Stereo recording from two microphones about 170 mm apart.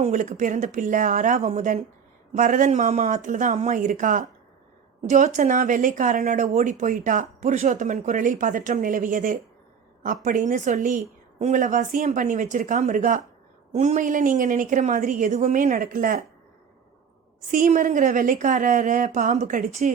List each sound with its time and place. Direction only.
0.0 s speech: 45° right (ahead or behind)
17.5 s speech: 50° right (ahead or behind)